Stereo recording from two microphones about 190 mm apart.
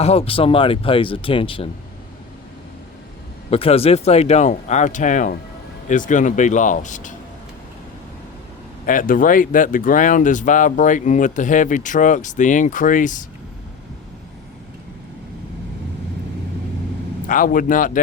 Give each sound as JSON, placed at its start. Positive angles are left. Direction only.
{"t": 0.0, "sound": "speech", "side_deg": 30}
{"t": 3.5, "sound": "speech", "side_deg": 30}
{"t": 8.9, "sound": "speech", "side_deg": 45}
{"t": 17.2, "sound": "speech", "side_deg": 45}